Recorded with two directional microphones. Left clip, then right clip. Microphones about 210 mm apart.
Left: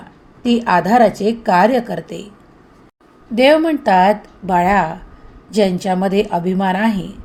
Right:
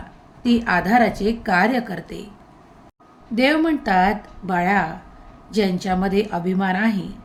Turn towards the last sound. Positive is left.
turn(degrees=15)  # may be behind; listen again after turning